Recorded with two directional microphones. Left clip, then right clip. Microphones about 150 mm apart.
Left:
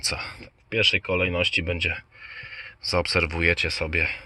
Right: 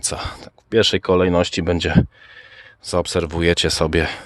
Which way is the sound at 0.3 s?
65° right (ahead or behind).